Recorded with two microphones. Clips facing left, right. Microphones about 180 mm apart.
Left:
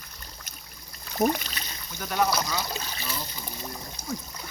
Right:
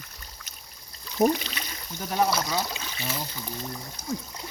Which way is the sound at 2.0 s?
30° right (ahead or behind).